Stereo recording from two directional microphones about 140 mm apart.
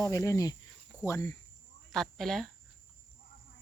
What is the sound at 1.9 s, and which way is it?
Speech, centre (ahead or behind).